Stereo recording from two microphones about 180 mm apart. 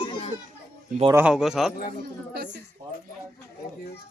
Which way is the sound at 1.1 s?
10° right (ahead or behind).